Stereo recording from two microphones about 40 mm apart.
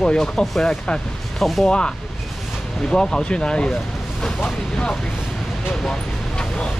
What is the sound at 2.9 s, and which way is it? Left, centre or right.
Speech, centre.